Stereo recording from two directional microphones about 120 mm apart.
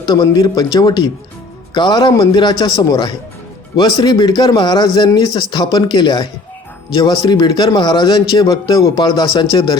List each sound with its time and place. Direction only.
0.0 s a man's voice: 35° left (ahead or behind)